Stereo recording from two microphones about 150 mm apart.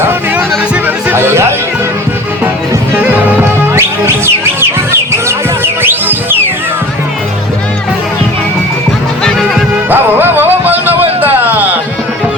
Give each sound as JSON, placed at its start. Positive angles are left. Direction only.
{"t": 0.0, "sound": "music", "side_deg": -15}
{"t": 5.8, "sound": "music", "side_deg": -15}
{"t": 9.9, "sound": "music", "side_deg": -15}
{"t": 11.2, "sound": "a sound", "side_deg": -10}